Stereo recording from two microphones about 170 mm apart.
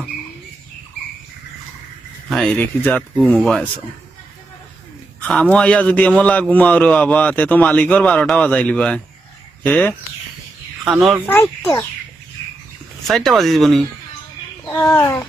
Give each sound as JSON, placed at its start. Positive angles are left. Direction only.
{"t": 2.3, "sound": "a man's voice", "side_deg": 5}
{"t": 5.2, "sound": "a man's voice", "side_deg": 5}
{"t": 11.3, "sound": "a man's voice", "side_deg": 10}
{"t": 13.1, "sound": "speech", "side_deg": 0}
{"t": 14.7, "sound": "a man's voice", "side_deg": 15}